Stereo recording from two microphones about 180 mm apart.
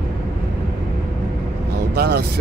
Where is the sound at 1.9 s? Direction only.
60° right (ahead or behind).